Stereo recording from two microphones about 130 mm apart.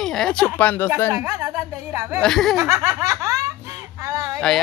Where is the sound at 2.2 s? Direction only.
Centre (ahead or behind).